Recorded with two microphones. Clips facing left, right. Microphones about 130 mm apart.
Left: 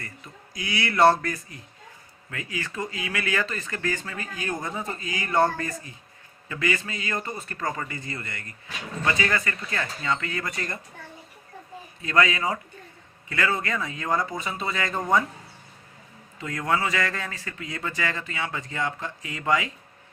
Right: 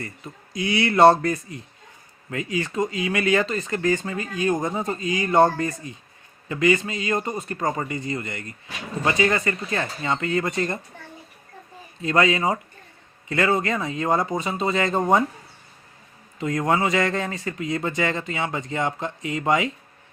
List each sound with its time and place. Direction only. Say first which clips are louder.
0.5 s speech: right 6 dB; 25° right (ahead or behind)
12.0 s speech: right 3 dB; 25° right (ahead or behind)
16.4 s speech: right 5 dB; 20° right (ahead or behind)